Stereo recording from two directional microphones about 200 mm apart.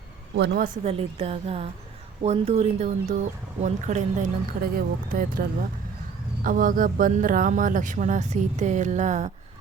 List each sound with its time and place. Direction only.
0.3 s a woman's voice: 60° right (ahead or behind)
0.9 s a woman's voice: 30° right (ahead or behind)